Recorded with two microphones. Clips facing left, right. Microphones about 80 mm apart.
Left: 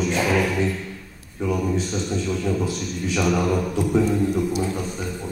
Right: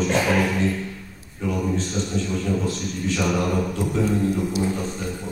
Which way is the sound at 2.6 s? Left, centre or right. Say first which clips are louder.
Right 1 dB; centre.